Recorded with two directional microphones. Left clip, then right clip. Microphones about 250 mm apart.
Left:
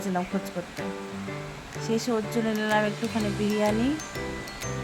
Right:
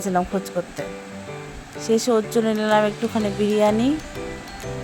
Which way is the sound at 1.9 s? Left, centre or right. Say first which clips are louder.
Right 8 dB; right.